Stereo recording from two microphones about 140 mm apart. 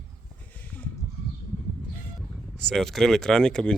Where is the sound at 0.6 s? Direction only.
10° left (ahead or behind).